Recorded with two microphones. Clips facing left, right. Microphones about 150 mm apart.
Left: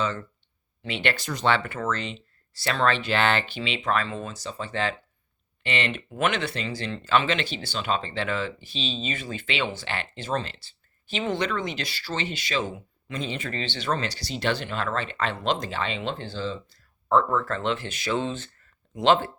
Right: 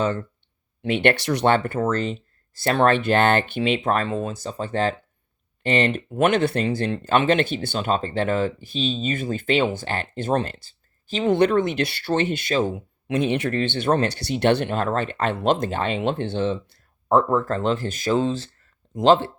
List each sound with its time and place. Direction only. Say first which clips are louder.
0.8 s speech: right 8 dB; 55° right (ahead or behind); by 1.5 s 75° right (ahead or behind)
1.5 s speech: right 4 dB; 45° right (ahead or behind)
13.1 s speech: right 10 dB; 65° right (ahead or behind)
17.2 s speech: right 5 dB; 40° right (ahead or behind)